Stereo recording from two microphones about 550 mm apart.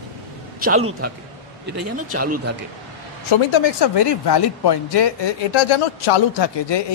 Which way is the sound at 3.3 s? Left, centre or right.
Left.